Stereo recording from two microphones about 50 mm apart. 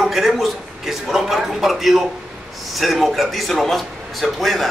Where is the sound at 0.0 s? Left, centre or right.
Centre.